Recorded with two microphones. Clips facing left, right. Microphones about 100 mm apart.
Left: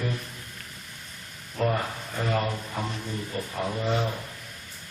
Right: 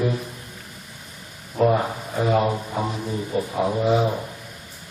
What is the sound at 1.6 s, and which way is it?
A man's voice, 15° right (ahead or behind).